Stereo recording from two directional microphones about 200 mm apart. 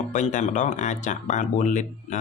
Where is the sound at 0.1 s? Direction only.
40° left (ahead or behind).